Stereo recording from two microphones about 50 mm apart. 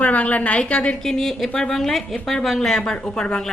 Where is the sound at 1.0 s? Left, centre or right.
Centre.